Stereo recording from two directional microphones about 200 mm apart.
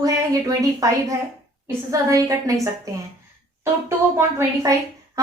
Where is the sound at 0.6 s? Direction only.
15° right (ahead or behind).